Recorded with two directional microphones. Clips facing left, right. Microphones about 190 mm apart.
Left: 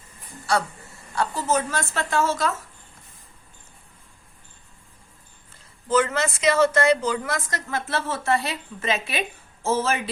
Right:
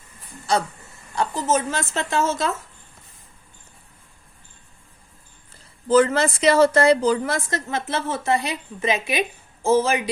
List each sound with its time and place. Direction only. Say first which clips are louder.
1.1 s a woman's voice: right 2 dB; 20° right (ahead or behind)
5.9 s a woman's voice: right 5 dB; 35° right (ahead or behind); by 10.0 s 15° right (ahead or behind)